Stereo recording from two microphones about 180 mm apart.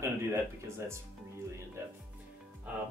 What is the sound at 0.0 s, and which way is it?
Speech, 15° right (ahead or behind).